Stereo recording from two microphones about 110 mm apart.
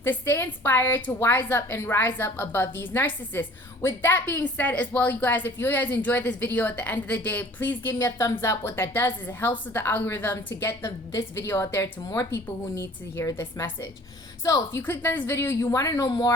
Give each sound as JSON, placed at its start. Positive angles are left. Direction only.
{"t": 0.0, "sound": "a woman's voice", "side_deg": 20}
{"t": 12.0, "sound": "speech", "side_deg": 35}
{"t": 12.3, "sound": "a woman's voice", "side_deg": 20}